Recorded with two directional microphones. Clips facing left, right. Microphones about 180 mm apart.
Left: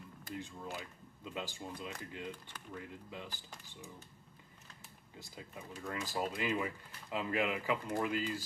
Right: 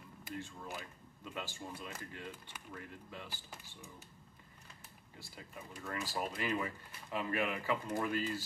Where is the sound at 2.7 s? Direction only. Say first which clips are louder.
Left 3 dB; 20° left (ahead or behind).